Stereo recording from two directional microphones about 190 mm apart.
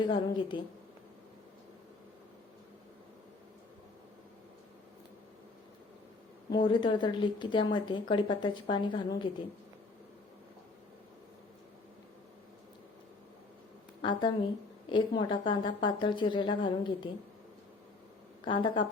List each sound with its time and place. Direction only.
0.0 s a woman's voice: 25° left (ahead or behind)
6.5 s a woman's voice: 25° left (ahead or behind)
14.0 s a woman's voice: 25° left (ahead or behind)
18.4 s a woman's voice: 25° left (ahead or behind)